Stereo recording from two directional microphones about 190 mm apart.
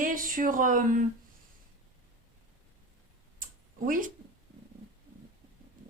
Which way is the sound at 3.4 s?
45° right (ahead or behind).